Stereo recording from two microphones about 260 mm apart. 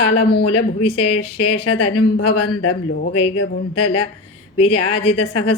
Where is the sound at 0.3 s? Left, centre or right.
Left.